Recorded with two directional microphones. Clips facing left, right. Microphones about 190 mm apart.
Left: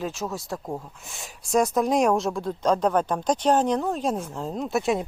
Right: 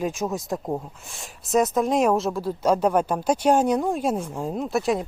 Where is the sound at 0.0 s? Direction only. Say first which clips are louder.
Right 4 dB; 15° right (ahead or behind).